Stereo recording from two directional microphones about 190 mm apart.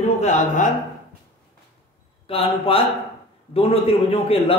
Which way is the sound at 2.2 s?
30° left (ahead or behind).